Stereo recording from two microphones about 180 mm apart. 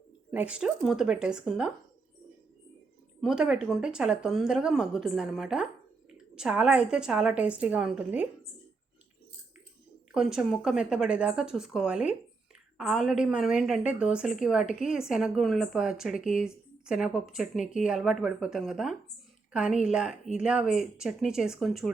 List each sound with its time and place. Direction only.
0.3 s a woman's voice: 5° right (ahead or behind)
3.2 s a woman's voice: 5° right (ahead or behind)
10.2 s a woman's voice: 5° right (ahead or behind)
17.6 s speech: 45° left (ahead or behind)
17.8 s a woman's voice: 5° right (ahead or behind)